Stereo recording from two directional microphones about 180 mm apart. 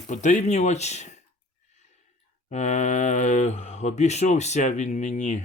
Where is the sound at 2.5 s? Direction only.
40° left (ahead or behind).